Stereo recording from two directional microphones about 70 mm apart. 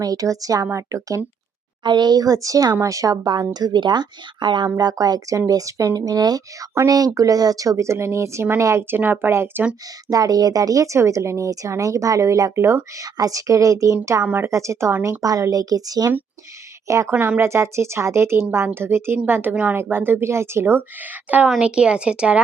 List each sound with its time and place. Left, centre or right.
0.0 s speech: right
1.8 s speech: right
3.5 s speech: right
4.8 s a woman's voice: right
10.1 s speech: right
13.0 s speech: right
15.2 s a woman's voice: right
16.9 s speech: right
17.2 s a woman's voice: right
21.2 s a woman's voice: right